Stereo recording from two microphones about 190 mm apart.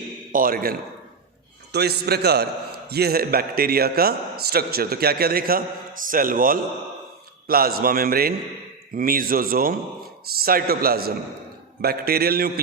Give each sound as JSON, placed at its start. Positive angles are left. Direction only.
{"t": 0.3, "sound": "a man's voice", "side_deg": -50}